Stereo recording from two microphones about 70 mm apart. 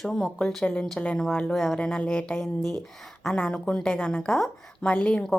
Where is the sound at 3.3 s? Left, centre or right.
Left.